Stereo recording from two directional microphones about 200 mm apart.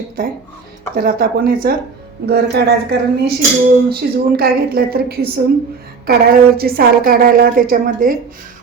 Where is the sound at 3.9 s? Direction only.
50° right (ahead or behind).